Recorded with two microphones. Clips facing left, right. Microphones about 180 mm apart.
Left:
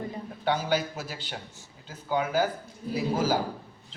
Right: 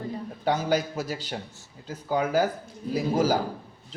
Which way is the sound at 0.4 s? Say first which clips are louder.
Right 2 dB; 40° right (ahead or behind).